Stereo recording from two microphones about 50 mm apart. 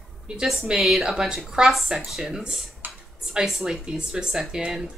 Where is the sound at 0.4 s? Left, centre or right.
Centre.